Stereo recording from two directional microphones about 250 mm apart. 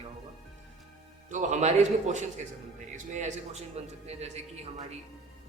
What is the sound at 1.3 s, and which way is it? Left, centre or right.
A man's voice, right.